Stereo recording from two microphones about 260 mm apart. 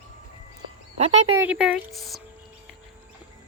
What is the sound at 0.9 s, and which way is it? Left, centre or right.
Speech, right.